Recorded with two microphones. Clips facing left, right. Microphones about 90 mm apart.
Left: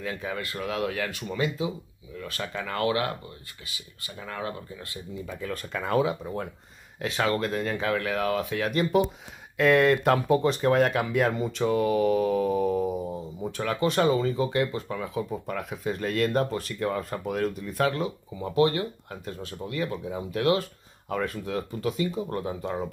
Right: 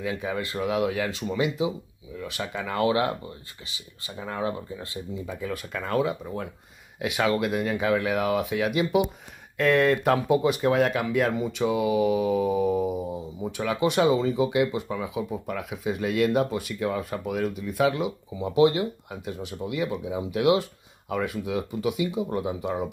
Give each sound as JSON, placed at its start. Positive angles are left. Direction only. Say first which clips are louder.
{"t": 0.0, "sound": "speech", "louder": "right 3 dB", "side_deg": -15}
{"t": 5.3, "sound": "speech", "louder": "even", "side_deg": -10}
{"t": 7.0, "sound": "speech", "louder": "right 2 dB", "side_deg": -10}
{"t": 9.6, "sound": "speech", "louder": "left 1 dB", "side_deg": 0}
{"t": 10.2, "sound": "speech", "louder": "right 1 dB", "side_deg": -10}